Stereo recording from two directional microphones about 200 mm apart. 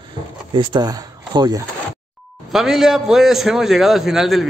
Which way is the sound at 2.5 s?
Centre (ahead or behind).